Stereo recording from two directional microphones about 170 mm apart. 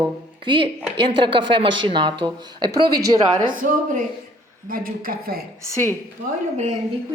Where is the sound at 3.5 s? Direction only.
55° right (ahead or behind).